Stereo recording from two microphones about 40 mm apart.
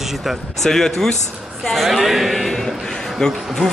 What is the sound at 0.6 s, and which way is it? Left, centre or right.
Speech, centre.